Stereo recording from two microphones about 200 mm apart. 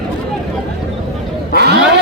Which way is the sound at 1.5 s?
55° right (ahead or behind).